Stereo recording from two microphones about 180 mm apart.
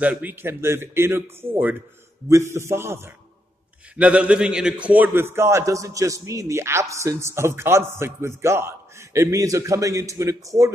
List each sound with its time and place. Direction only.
0.0 s a man's voice: 10° right (ahead or behind)